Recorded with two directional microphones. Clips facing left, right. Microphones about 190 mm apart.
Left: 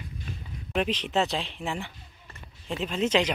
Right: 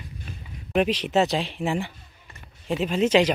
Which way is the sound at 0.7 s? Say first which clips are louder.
Right 5 dB; 5° right (ahead or behind).